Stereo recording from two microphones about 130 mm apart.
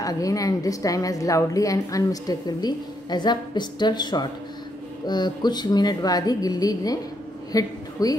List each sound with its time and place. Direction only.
0.0 s a woman's voice: 25° left (ahead or behind)